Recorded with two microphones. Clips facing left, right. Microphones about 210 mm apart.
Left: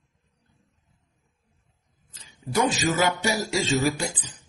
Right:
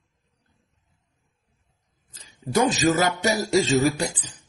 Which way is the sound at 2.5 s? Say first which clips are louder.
Right 3 dB; 40° right (ahead or behind).